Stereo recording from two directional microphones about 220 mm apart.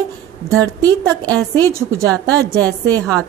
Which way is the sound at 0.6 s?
15° right (ahead or behind).